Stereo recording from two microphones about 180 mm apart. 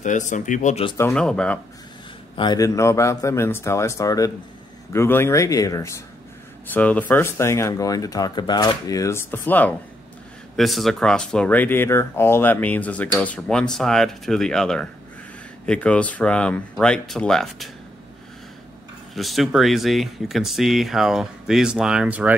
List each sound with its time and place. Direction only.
0.0 s speech: 45° left (ahead or behind)
0.9 s speech: 15° left (ahead or behind)
2.3 s speech: 25° left (ahead or behind); by 17.6 s centre (ahead or behind)
19.1 s speech: centre (ahead or behind)